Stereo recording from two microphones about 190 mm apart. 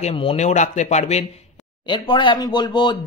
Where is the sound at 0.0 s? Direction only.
30° left (ahead or behind).